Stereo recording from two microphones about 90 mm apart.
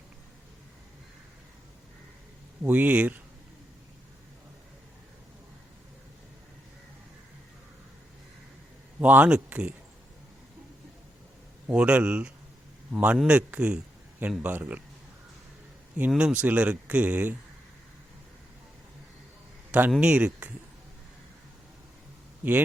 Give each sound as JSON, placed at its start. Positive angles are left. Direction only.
{"t": 2.6, "sound": "speech", "side_deg": -20}
{"t": 9.0, "sound": "speech", "side_deg": -20}
{"t": 11.7, "sound": "speech", "side_deg": -10}
{"t": 16.0, "sound": "speech", "side_deg": -15}
{"t": 20.0, "sound": "speech", "side_deg": -15}
{"t": 22.4, "sound": "speech", "side_deg": -15}